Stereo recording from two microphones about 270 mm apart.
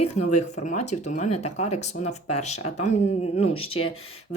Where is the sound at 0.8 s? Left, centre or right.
Left.